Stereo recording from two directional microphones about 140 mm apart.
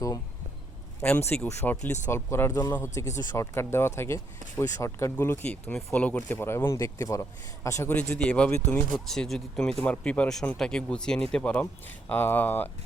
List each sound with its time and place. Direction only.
1.5 s speech: 20° left (ahead or behind)